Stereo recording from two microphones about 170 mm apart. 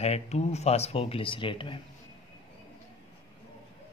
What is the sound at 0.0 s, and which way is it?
Speech, 40° left (ahead or behind).